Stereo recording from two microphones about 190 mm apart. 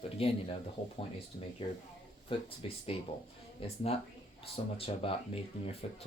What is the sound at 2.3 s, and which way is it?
Speech, 30° left (ahead or behind).